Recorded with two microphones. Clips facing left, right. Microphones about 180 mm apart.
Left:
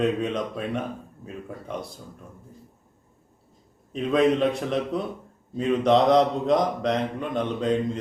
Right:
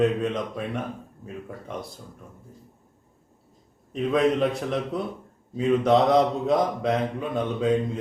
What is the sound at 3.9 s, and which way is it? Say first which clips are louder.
A man's voice: left 1 dB; centre (ahead or behind).